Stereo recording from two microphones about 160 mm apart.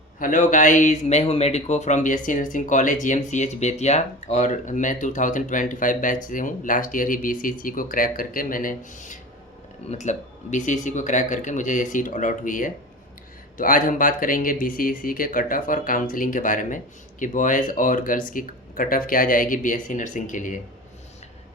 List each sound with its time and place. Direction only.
0.2 s speech: 55° left (ahead or behind)